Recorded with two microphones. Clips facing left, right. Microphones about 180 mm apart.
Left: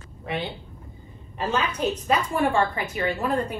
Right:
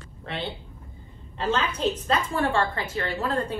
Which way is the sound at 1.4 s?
15° left (ahead or behind).